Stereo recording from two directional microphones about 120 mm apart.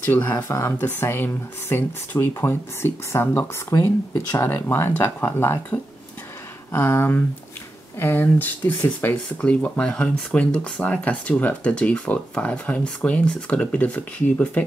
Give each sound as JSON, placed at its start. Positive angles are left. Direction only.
{"t": 0.0, "sound": "speech", "side_deg": 15}
{"t": 6.7, "sound": "speech", "side_deg": 20}